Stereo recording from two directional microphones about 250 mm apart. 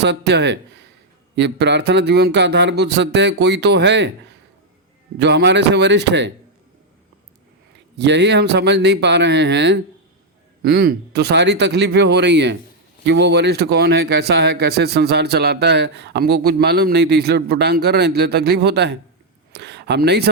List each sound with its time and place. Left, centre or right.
0.0 s speech: right
5.2 s speech: right
7.9 s speech: right